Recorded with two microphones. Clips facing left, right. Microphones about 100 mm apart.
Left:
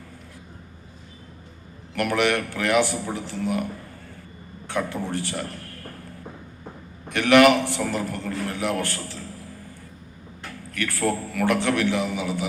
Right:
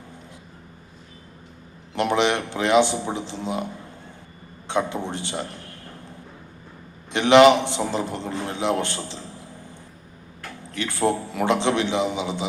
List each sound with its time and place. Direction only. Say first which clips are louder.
2.0 s a man's voice: right 1 dB; 20° right (ahead or behind)
7.1 s a man's voice: right 2 dB; 20° right (ahead or behind)